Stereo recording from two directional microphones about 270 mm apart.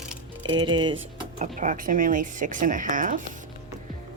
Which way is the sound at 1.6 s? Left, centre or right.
Right.